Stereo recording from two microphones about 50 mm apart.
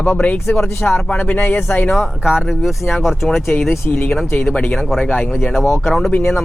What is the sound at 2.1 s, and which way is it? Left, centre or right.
Speech, centre.